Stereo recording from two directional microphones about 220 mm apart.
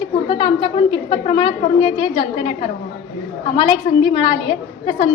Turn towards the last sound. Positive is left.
turn(degrees=25)  # may be behind; listen again after turning